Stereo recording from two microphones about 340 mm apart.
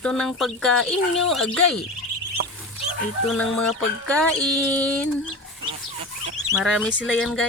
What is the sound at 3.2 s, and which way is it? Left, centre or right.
Speech, centre.